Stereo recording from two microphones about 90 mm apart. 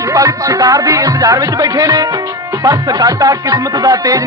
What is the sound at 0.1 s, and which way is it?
Music, 40° right (ahead or behind).